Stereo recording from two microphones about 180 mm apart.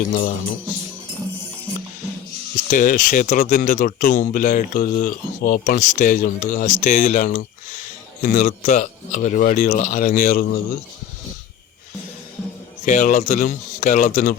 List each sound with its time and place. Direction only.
0.1 s speech: 50° left (ahead or behind)
2.6 s speech: 50° left (ahead or behind)
12.8 s speech: 45° left (ahead or behind)